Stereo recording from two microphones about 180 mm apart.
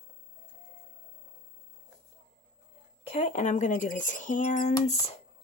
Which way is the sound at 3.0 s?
35° left (ahead or behind).